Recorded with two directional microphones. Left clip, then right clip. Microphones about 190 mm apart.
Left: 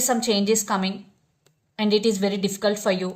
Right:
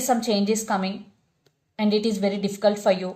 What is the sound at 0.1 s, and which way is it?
A woman's voice, 45° left (ahead or behind).